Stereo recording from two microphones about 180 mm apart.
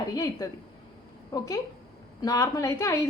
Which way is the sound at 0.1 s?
20° left (ahead or behind).